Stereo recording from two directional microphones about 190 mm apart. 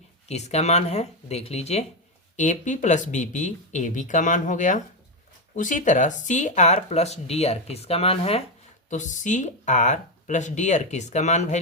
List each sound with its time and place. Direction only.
0.3 s speech: 35° left (ahead or behind)